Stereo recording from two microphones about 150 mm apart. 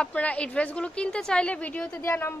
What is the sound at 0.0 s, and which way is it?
A woman's voice, 10° left (ahead or behind).